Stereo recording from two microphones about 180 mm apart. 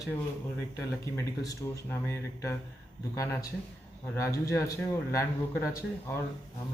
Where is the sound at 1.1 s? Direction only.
15° left (ahead or behind).